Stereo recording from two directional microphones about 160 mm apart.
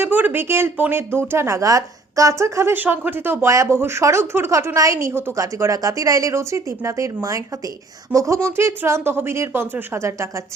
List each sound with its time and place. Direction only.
0.0 s a woman's voice: 10° right (ahead or behind)